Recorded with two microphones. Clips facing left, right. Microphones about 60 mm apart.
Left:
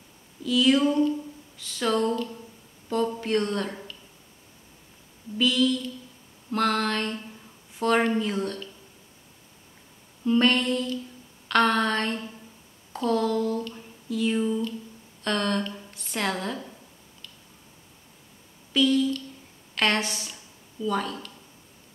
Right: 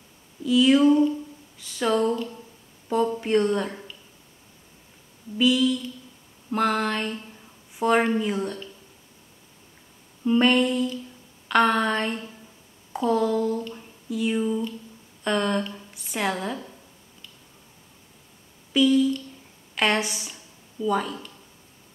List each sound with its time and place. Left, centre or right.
0.4 s speech: centre
5.4 s speech: centre
10.2 s a woman's voice: centre
18.7 s speech: centre